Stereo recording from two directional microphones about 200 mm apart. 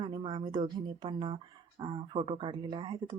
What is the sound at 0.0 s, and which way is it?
Speech, 25° right (ahead or behind).